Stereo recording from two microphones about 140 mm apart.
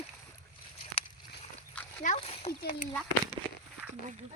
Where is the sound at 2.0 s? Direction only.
45° left (ahead or behind).